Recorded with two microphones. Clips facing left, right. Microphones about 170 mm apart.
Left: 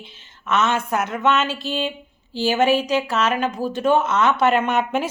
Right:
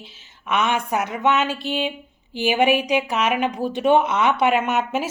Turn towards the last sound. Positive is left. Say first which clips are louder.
# left 2 dB
turn(degrees=-5)  # may be behind; listen again after turning